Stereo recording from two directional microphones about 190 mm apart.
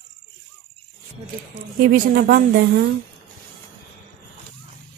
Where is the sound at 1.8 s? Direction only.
55° right (ahead or behind).